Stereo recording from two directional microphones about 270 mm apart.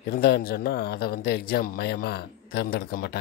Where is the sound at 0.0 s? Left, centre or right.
Left.